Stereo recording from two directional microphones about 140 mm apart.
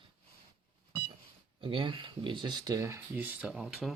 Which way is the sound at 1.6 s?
35° right (ahead or behind).